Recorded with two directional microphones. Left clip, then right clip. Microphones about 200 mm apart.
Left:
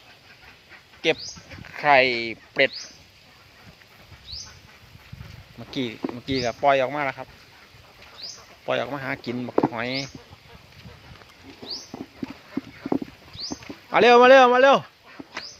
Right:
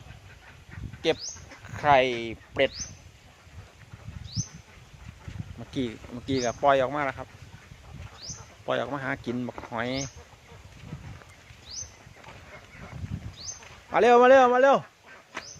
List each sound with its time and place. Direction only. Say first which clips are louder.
1.7 s speech: left 3 dB; 5° left (ahead or behind)
5.5 s speech: left 3 dB; centre (ahead or behind)
8.6 s speech: left 3 dB; centre (ahead or behind)
13.9 s speech: left 4 dB; 15° left (ahead or behind)